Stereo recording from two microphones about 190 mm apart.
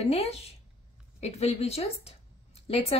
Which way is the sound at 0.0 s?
30° left (ahead or behind).